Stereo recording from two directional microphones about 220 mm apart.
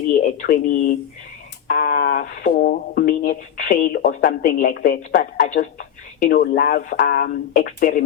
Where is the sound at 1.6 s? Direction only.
40° left (ahead or behind).